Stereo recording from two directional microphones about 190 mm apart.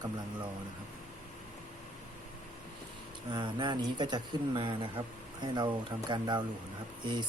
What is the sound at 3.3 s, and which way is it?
Speech, 25° right (ahead or behind).